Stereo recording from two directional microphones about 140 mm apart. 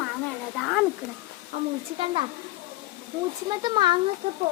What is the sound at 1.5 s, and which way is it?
Speech, 55° right (ahead or behind).